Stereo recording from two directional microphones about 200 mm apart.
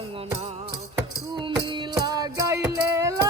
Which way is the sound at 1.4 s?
25° right (ahead or behind).